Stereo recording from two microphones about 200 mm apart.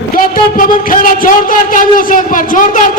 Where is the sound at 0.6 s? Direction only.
45° left (ahead or behind).